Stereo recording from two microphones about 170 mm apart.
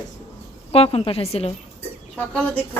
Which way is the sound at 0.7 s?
35° left (ahead or behind).